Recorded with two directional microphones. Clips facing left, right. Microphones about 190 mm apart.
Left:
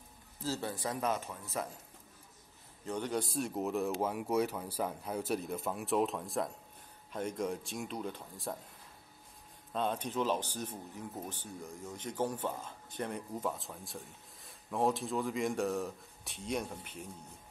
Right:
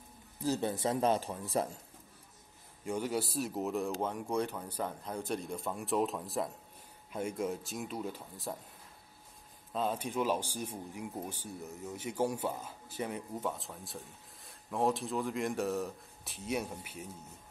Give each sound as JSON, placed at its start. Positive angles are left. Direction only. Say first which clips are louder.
{"t": 0.4, "sound": "speech", "louder": "right 5 dB", "side_deg": -20}
{"t": 2.8, "sound": "speech", "louder": "right 1 dB", "side_deg": -10}
{"t": 9.7, "sound": "speech", "louder": "even", "side_deg": -5}